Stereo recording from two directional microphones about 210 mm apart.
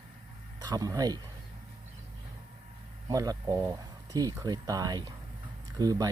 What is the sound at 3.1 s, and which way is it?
Speech, 15° right (ahead or behind).